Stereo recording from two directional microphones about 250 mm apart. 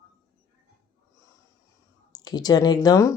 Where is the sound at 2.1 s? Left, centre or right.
Centre.